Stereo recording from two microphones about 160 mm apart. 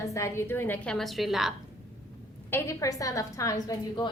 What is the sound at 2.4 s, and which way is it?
A woman's voice, 15° left (ahead or behind).